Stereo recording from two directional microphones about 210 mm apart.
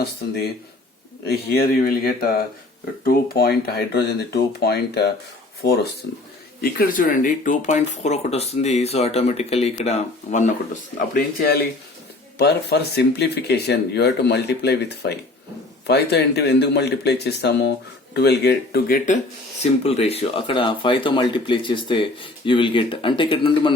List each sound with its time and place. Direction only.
1.3 s speech: 50° left (ahead or behind); by 10.5 s 35° left (ahead or behind)
10.9 s speech: 45° left (ahead or behind)
19.8 s speech: 30° left (ahead or behind)